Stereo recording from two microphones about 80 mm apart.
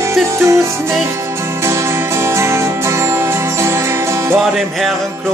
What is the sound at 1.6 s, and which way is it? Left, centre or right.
Music, right.